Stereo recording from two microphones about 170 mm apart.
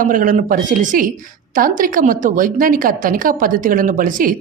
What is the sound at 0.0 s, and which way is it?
Speech, 50° right (ahead or behind).